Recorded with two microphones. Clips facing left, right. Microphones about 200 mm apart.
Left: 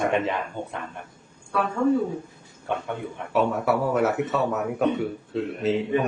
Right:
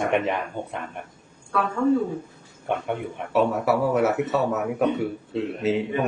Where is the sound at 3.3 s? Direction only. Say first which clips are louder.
Right 1 dB; centre (ahead or behind).